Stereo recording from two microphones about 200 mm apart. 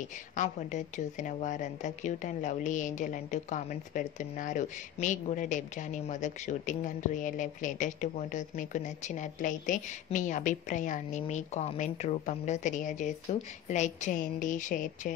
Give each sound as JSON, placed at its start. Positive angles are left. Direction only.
{"t": 0.4, "sound": "speech", "side_deg": 35}